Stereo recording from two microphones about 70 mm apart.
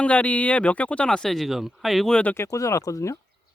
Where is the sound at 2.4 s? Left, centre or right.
Left.